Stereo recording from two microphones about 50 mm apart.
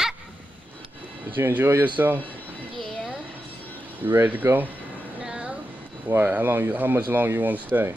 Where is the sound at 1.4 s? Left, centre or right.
Right.